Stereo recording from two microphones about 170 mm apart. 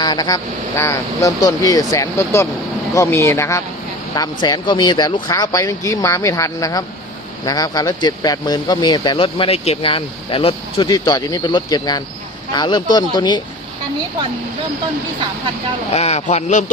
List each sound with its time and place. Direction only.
0.0 s speech: 25° left (ahead or behind)
15.9 s speech: 40° left (ahead or behind)